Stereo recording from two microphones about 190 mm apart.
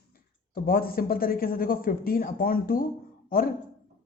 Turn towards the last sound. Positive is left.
turn(degrees=50)  # may be behind; listen again after turning